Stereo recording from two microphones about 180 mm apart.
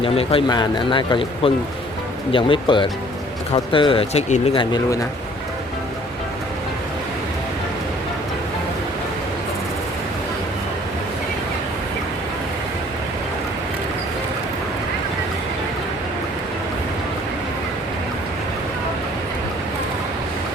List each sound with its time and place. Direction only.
0.0 s speech: 30° left (ahead or behind)